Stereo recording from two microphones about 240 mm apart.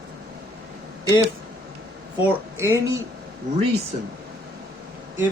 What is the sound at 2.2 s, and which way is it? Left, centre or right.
Speech, centre.